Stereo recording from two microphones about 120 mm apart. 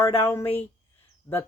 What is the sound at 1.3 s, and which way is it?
Speech, 40° left (ahead or behind).